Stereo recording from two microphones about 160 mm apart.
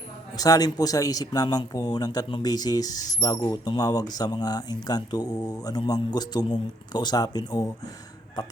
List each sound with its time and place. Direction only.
0.3 s a man's voice: 25° left (ahead or behind)